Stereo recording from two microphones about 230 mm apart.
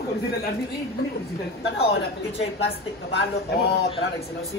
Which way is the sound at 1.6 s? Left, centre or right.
Left.